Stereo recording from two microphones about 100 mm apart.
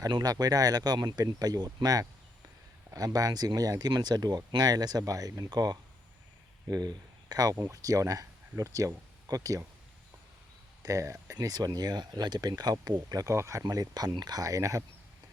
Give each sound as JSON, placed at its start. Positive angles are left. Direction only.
{"t": 0.0, "sound": "speech", "side_deg": -40}
{"t": 10.8, "sound": "speech", "side_deg": -30}